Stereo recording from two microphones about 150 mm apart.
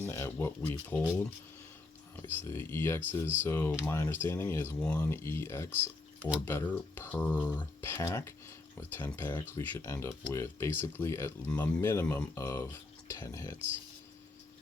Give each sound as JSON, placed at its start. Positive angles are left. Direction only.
{"t": 0.0, "sound": "speech", "side_deg": 15}
{"t": 2.2, "sound": "speech", "side_deg": 15}